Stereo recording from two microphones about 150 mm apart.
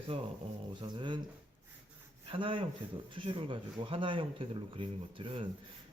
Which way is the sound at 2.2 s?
35° right (ahead or behind).